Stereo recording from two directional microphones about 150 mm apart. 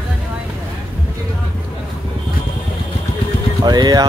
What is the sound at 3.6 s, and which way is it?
Speech, 25° right (ahead or behind).